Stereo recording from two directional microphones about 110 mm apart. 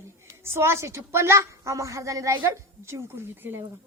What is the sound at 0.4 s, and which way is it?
A woman's voice, 25° right (ahead or behind).